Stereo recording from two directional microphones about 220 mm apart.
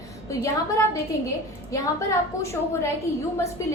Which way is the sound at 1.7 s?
15° left (ahead or behind).